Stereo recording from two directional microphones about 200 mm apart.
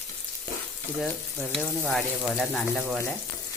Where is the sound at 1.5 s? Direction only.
Centre (ahead or behind).